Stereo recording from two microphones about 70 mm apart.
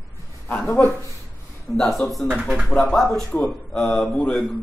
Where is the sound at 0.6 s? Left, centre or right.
Left.